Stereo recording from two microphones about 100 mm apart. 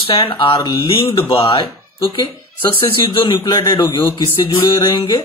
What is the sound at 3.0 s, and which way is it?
A man's voice, 55° left (ahead or behind).